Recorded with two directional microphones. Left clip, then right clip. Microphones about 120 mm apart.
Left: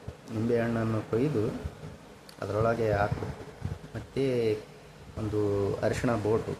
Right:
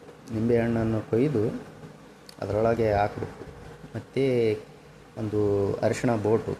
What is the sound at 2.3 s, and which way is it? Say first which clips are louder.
Speech: right 4 dB; 25° right (ahead or behind).